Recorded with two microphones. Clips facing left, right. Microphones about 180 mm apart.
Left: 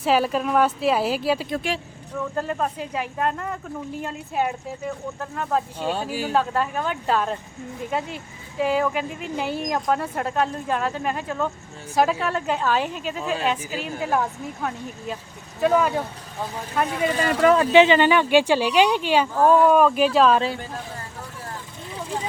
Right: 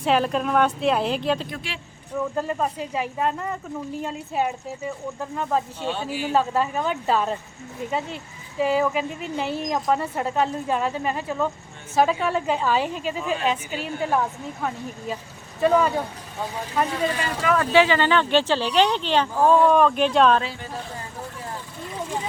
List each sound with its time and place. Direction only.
0.0 s speech: 5° left (ahead or behind)
1.5 s speech: 40° left (ahead or behind)
2.1 s speech: 5° right (ahead or behind)
5.8 s speech: 40° left (ahead or behind)
6.3 s speech: 5° right (ahead or behind)
17.5 s speech: 20° left (ahead or behind); by 20.4 s 5° left (ahead or behind)